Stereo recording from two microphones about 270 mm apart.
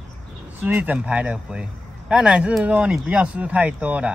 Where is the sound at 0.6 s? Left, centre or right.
Centre.